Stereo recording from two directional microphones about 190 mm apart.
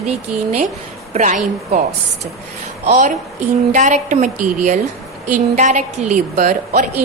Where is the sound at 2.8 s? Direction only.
35° right (ahead or behind).